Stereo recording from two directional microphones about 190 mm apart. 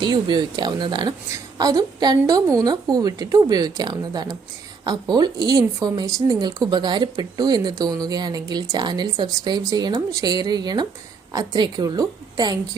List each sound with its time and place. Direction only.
0.0 s speech: 20° right (ahead or behind)